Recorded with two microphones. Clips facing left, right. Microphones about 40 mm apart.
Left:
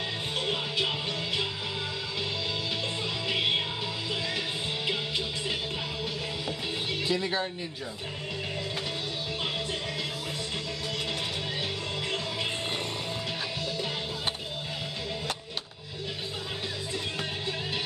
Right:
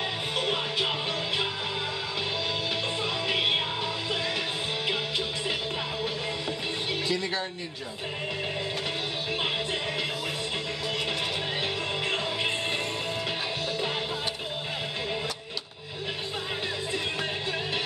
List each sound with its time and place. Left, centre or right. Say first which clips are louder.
0.4 s music: right 2 dB; centre
3.3 s music: right 1 dB; centre
7.1 s speech: left 2 dB; centre
12.1 s music: right 3 dB; right